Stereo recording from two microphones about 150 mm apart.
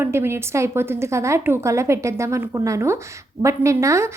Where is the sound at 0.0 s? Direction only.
15° right (ahead or behind).